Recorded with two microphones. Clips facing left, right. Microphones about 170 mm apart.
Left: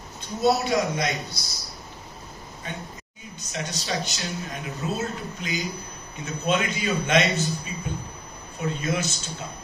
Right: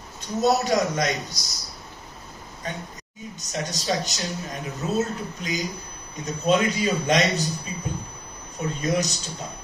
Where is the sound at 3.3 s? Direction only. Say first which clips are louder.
Right 2 dB; 40° right (ahead or behind).